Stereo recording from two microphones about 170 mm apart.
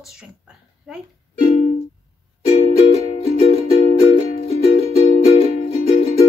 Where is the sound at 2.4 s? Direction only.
35° left (ahead or behind).